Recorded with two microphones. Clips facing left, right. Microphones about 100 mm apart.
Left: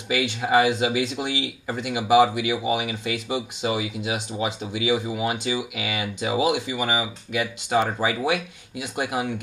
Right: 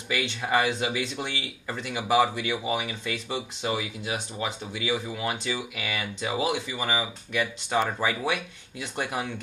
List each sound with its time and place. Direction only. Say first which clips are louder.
0.1 s speech: left 5 dB; 15° left (ahead or behind)